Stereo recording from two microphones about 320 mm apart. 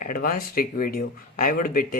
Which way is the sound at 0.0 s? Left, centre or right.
Left.